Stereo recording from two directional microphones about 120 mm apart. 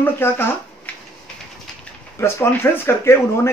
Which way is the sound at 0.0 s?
20° left (ahead or behind).